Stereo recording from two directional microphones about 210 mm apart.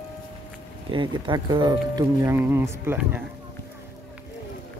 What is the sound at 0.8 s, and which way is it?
Speech, 25° right (ahead or behind).